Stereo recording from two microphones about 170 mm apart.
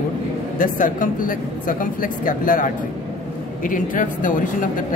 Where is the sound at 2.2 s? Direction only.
50° left (ahead or behind).